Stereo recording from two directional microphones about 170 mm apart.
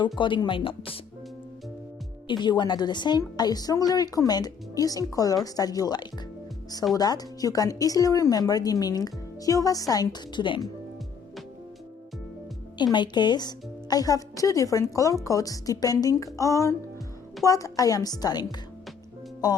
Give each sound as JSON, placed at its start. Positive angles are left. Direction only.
{"t": 0.0, "sound": "a woman's voice", "side_deg": 25}
{"t": 2.2, "sound": "a woman's voice", "side_deg": 25}
{"t": 12.8, "sound": "a woman's voice", "side_deg": 25}